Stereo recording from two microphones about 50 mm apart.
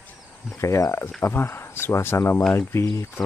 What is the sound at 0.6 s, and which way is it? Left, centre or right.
Speech, left.